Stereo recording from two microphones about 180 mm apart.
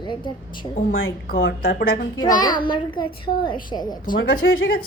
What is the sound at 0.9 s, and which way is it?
Speech, 90° left.